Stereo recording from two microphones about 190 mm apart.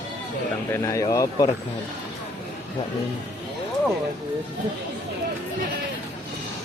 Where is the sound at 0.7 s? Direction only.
15° left (ahead or behind).